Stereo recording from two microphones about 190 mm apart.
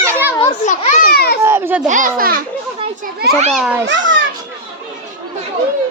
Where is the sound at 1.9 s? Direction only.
45° right (ahead or behind).